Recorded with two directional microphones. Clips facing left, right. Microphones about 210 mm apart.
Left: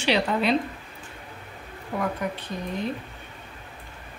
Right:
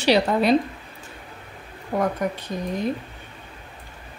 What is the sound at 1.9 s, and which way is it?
Speech, 50° right (ahead or behind).